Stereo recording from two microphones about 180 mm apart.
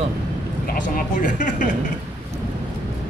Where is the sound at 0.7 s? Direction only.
45° left (ahead or behind).